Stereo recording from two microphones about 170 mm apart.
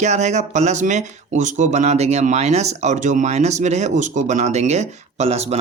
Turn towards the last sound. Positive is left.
turn(degrees=-40)  # may be behind; listen again after turning